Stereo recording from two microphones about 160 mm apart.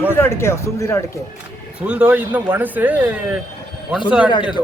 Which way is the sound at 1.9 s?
5° right (ahead or behind).